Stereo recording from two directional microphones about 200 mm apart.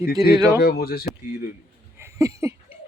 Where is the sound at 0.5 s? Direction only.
50° left (ahead or behind).